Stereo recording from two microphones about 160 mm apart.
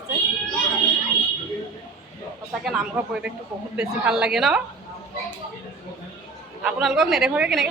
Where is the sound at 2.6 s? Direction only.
5° right (ahead or behind).